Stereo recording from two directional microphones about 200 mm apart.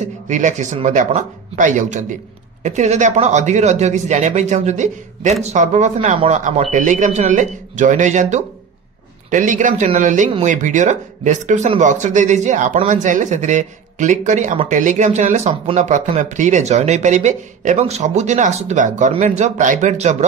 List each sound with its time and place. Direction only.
0.3 s speech: 35° right (ahead or behind)